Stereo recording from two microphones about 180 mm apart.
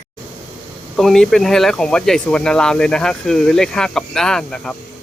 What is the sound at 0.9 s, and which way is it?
Speech, centre (ahead or behind).